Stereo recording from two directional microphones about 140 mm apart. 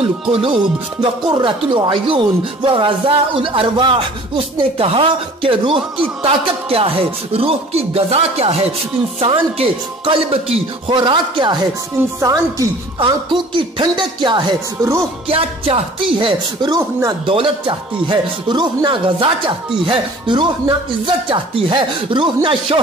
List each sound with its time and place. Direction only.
0.0 s music: 40° right (ahead or behind)
12.0 s speech: 20° right (ahead or behind)
13.0 s music: 35° right (ahead or behind)